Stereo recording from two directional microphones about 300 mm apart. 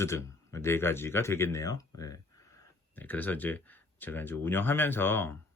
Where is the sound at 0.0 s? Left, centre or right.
Centre.